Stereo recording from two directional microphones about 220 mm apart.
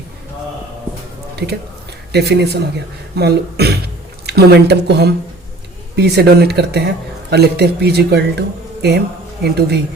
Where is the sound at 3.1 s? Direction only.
45° right (ahead or behind).